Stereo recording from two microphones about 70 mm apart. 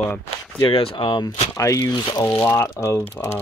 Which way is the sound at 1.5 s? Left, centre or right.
Left.